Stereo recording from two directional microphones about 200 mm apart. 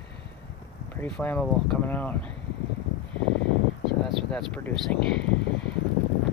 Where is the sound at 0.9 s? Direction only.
10° left (ahead or behind).